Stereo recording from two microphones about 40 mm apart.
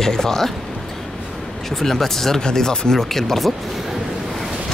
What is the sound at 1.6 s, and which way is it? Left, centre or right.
Speech, centre.